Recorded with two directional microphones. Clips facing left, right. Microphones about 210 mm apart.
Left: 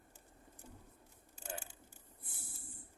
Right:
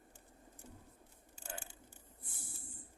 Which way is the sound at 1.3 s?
5° left (ahead or behind).